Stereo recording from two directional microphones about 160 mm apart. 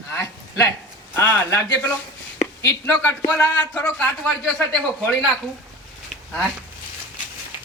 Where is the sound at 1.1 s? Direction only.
10° left (ahead or behind).